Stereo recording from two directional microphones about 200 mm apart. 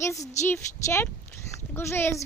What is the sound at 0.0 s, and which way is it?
A woman's voice, 15° left (ahead or behind).